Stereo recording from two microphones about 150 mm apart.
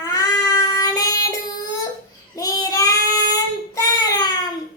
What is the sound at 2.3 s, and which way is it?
Child singing, 25° left (ahead or behind).